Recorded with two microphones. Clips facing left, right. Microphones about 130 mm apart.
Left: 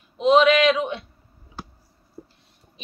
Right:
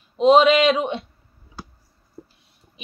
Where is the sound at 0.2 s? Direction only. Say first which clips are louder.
Right 2 dB; 30° right (ahead or behind).